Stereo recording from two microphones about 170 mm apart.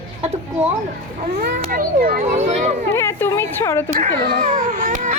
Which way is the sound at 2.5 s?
40° right (ahead or behind).